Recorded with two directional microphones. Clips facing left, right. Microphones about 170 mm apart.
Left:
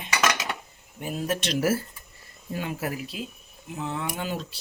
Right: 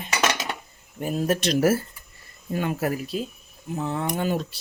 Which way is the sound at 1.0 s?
45° right (ahead or behind).